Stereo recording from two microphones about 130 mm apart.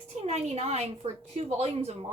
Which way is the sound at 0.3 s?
55° right (ahead or behind).